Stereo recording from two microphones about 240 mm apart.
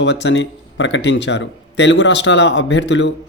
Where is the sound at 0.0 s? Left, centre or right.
Left.